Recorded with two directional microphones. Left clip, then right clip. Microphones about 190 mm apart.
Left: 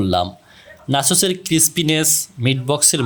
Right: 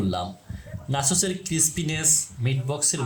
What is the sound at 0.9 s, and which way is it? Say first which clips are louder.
Speech: left 8 dB; 55° left (ahead or behind).